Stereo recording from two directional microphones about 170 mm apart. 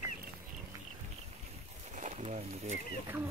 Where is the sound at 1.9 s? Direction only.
45° right (ahead or behind).